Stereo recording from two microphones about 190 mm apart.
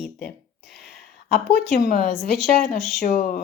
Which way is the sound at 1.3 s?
50° left (ahead or behind).